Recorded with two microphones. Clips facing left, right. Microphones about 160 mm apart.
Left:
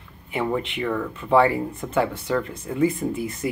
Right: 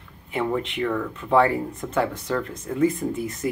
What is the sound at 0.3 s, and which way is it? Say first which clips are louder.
Speech: even; 5° left (ahead or behind).